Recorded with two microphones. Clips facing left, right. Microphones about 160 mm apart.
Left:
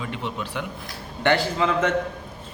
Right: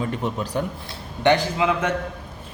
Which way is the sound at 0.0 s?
45° right (ahead or behind).